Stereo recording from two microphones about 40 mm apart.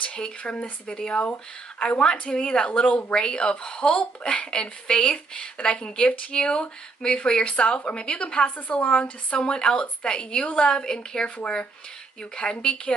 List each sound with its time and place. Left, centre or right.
0.0 s a woman's voice: left
8.5 s a woman's voice: left
8.7 s a woman's voice: left
10.4 s speech: left
10.7 s a woman's voice: centre
11.2 s a woman's voice: left